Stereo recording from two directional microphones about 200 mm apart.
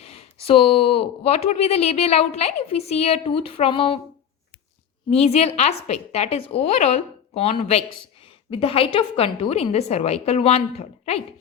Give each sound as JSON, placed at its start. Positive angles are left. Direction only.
{"t": 0.4, "sound": "speech", "side_deg": 30}
{"t": 5.2, "sound": "a woman's voice", "side_deg": 30}